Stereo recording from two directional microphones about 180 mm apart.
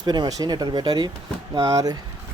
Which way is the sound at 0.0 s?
25° right (ahead or behind).